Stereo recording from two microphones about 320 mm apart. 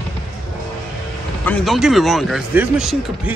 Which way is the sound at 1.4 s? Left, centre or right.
Centre.